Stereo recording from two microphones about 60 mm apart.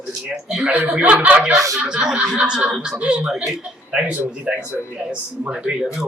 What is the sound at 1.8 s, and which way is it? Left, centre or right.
Speech, centre.